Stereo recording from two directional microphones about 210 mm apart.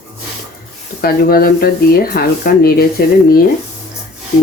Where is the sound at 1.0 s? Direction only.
45° left (ahead or behind).